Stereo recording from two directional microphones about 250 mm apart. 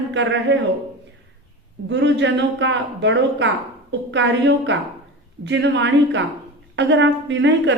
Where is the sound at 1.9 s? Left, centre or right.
Right.